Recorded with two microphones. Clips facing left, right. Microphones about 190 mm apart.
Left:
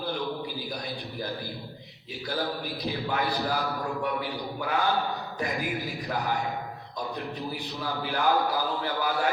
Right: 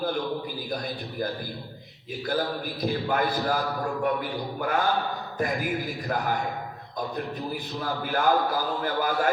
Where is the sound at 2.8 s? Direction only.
50° right (ahead or behind).